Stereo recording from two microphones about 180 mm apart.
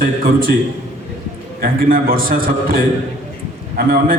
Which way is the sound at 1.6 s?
50° right (ahead or behind).